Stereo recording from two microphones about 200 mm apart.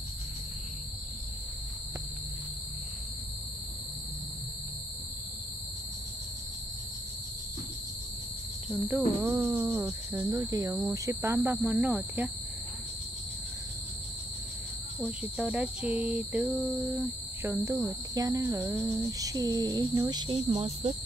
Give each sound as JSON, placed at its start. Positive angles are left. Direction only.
{"t": 8.8, "sound": "speech", "side_deg": -15}
{"t": 11.5, "sound": "cricket", "side_deg": 0}
{"t": 15.0, "sound": "cricket", "side_deg": -5}
{"t": 17.4, "sound": "speech", "side_deg": -15}
{"t": 18.6, "sound": "speech", "side_deg": -10}